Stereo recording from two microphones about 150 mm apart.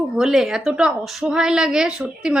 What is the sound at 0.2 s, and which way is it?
A woman's voice, 5° right (ahead or behind).